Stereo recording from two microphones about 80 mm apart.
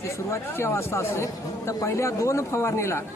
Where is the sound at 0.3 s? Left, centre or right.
Left.